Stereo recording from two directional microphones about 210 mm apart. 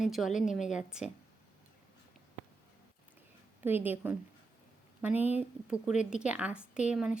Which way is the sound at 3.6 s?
10° right (ahead or behind).